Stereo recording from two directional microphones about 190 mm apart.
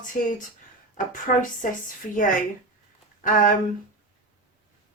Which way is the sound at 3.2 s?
45° left (ahead or behind).